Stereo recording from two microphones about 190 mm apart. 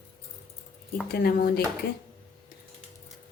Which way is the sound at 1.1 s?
55° left (ahead or behind).